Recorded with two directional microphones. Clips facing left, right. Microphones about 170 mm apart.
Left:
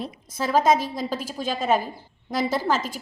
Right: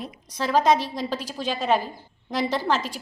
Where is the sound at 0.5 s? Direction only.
45° left (ahead or behind).